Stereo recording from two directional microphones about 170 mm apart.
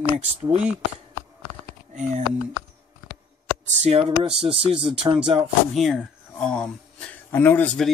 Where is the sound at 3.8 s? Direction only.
35° right (ahead or behind).